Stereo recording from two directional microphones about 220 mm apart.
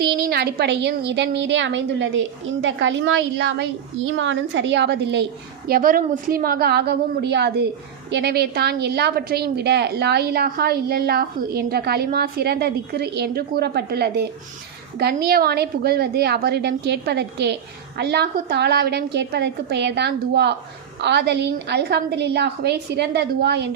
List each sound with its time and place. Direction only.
0.0 s a woman's voice: 45° right (ahead or behind)
5.6 s a woman's voice: 40° right (ahead or behind)